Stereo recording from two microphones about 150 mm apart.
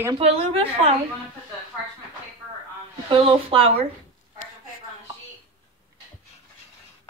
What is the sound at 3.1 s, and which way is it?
Speech, 35° right (ahead or behind).